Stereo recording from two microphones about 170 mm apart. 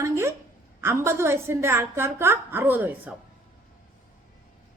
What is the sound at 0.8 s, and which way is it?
A woman's voice, 15° right (ahead or behind).